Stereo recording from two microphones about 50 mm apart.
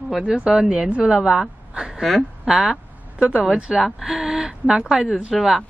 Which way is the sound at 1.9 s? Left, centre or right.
Centre.